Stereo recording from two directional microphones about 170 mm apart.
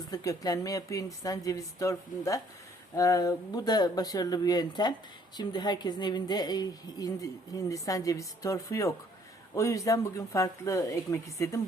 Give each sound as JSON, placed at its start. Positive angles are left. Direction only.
{"t": 0.1, "sound": "speech", "side_deg": 20}